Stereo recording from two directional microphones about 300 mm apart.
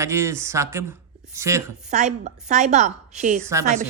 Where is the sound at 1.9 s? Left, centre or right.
Right.